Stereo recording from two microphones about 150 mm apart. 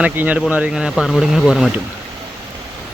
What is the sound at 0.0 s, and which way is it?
Speech, 10° right (ahead or behind).